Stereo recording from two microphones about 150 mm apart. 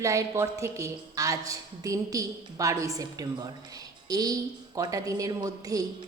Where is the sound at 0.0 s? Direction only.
20° right (ahead or behind).